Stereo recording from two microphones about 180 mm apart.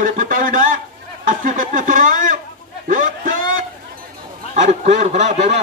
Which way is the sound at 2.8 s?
45° right (ahead or behind).